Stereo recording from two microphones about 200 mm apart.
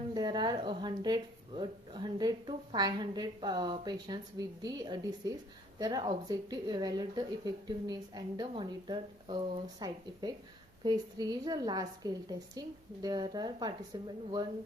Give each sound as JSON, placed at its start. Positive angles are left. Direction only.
{"t": 0.1, "sound": "speech", "side_deg": -20}